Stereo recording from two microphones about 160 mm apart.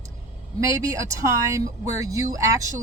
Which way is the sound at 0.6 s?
20° right (ahead or behind).